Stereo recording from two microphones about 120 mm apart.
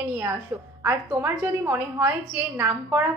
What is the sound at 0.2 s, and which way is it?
A woman's voice, 15° right (ahead or behind).